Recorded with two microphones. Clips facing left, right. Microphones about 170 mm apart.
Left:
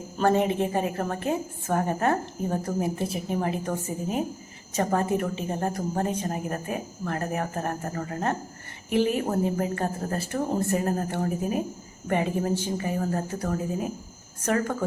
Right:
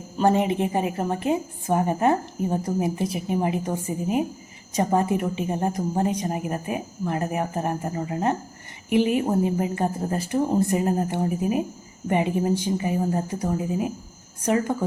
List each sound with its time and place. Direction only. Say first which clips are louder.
0.2 s a woman's voice: right 2 dB; 15° right (ahead or behind)